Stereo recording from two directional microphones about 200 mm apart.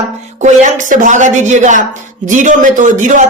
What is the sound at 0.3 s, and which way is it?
A woman's voice, 35° right (ahead or behind).